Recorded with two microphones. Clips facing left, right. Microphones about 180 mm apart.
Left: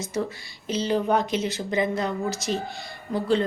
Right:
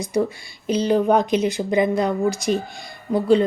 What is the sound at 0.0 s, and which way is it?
Speech, 15° right (ahead or behind).